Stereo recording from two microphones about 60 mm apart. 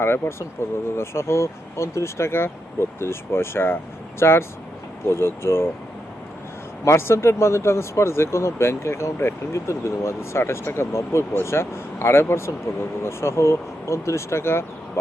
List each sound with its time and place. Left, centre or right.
0.0 s speech: left
6.8 s speech: left